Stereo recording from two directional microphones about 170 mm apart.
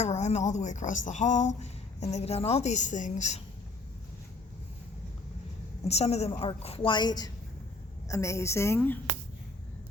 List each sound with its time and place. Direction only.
0.0 s speech: 40° left (ahead or behind)
5.8 s a woman's voice: 40° left (ahead or behind); by 9.0 s 10° left (ahead or behind)